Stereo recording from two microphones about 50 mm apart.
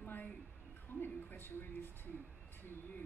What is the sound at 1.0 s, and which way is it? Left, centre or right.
A woman's voice, left.